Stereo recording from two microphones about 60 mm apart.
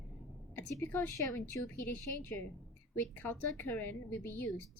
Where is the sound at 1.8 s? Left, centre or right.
Left.